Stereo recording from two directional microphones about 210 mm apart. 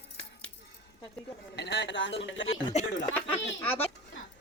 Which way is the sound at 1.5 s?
55° left (ahead or behind).